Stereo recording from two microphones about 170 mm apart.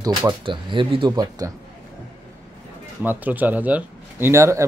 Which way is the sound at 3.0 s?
10° right (ahead or behind).